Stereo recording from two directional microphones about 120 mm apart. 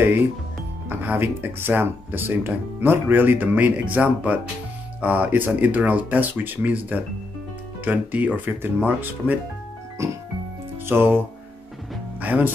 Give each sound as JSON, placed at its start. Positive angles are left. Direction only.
{"t": 0.8, "sound": "speech", "side_deg": -20}
{"t": 10.0, "sound": "music", "side_deg": -25}
{"t": 10.9, "sound": "speech", "side_deg": -20}